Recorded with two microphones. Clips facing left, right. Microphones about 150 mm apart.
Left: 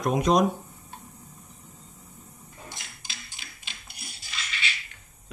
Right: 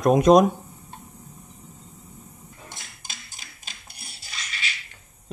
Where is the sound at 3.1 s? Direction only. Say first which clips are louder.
Right 1 dB; 45° right (ahead or behind).